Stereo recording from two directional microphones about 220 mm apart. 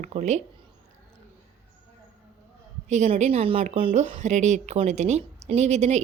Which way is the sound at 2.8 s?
30° right (ahead or behind).